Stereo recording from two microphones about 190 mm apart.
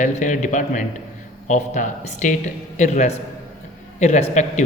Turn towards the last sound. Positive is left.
turn(degrees=40)  # may be behind; listen again after turning